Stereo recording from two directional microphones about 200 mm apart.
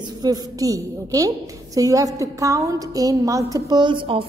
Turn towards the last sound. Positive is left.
turn(degrees=-25)  # may be behind; listen again after turning